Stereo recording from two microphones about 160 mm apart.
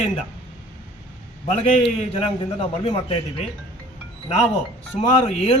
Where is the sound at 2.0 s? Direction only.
35° left (ahead or behind).